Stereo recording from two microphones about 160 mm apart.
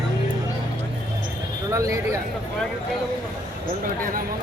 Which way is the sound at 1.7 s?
20° right (ahead or behind).